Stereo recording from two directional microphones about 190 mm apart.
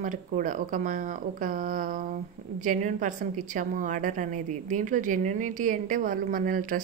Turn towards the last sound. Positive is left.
turn(degrees=-45)  # may be behind; listen again after turning